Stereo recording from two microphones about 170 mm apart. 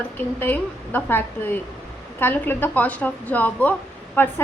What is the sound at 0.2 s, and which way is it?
A woman's voice, 10° left (ahead or behind).